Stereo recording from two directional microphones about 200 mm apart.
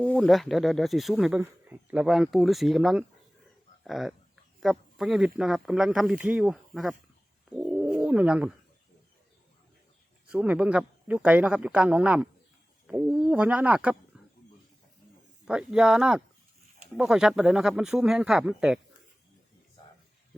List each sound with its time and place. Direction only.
0.0 s speech: 5° left (ahead or behind)
7.5 s bird: 5° right (ahead or behind)
10.3 s speech: 5° right (ahead or behind)
15.4 s speech: 5° right (ahead or behind)